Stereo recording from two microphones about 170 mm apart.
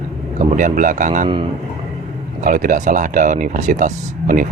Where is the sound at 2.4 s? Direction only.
50° right (ahead or behind).